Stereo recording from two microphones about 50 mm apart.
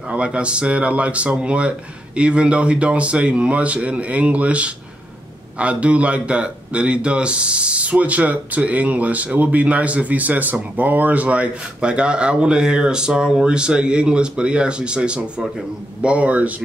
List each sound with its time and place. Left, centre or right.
0.1 s a man's voice: right